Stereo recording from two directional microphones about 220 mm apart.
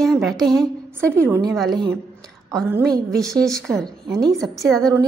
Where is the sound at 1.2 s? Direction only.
10° right (ahead or behind).